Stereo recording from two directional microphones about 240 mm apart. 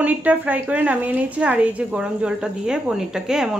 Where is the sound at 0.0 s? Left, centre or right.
Centre.